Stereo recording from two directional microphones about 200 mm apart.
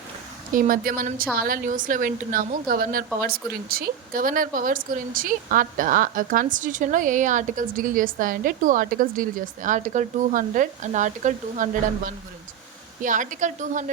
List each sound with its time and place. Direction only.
0.5 s a woman's voice: 45° right (ahead or behind)